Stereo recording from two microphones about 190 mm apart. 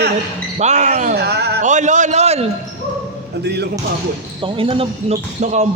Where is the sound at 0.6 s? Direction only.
35° right (ahead or behind).